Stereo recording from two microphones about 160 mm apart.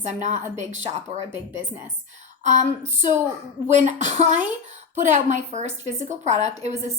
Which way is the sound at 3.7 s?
45° right (ahead or behind).